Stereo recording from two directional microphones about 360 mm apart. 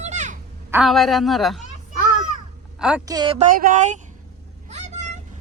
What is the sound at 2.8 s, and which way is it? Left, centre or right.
Speech, centre.